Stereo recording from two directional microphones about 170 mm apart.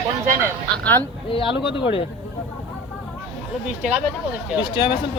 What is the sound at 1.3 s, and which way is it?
Speech, 30° left (ahead or behind).